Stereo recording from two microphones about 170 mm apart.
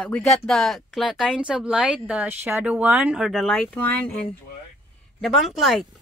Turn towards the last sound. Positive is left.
turn(degrees=0)  # may be behind; listen again after turning